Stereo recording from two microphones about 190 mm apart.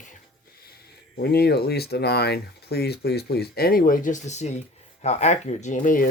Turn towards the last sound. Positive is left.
turn(degrees=45)  # may be behind; listen again after turning